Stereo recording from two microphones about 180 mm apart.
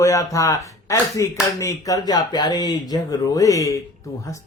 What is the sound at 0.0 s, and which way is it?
A man's voice, 15° left (ahead or behind).